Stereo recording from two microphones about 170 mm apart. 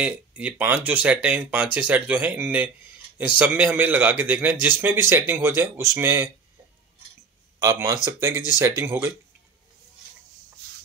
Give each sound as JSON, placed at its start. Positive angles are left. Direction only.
{"t": 0.0, "sound": "a man's voice", "side_deg": -10}
{"t": 7.6, "sound": "a man's voice", "side_deg": -20}